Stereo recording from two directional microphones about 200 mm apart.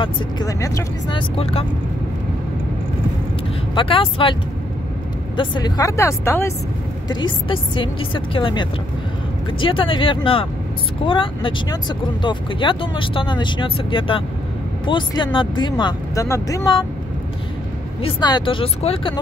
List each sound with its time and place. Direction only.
0.0 s speech: 20° left (ahead or behind)
3.7 s speech: 25° left (ahead or behind)
18.0 s speech: 25° left (ahead or behind)